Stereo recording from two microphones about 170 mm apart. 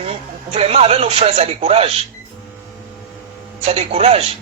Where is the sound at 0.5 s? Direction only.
35° right (ahead or behind).